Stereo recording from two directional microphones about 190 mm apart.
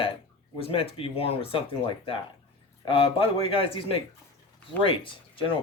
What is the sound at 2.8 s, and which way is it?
Speech, 30° left (ahead or behind).